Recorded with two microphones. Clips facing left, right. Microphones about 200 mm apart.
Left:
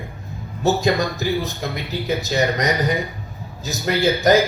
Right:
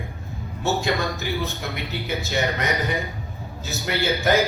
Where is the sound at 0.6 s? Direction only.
35° left (ahead or behind).